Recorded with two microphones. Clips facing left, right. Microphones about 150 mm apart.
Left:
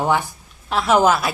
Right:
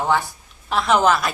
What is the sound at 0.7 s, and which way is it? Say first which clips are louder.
Speech: left 1 dB; 5° left (ahead or behind).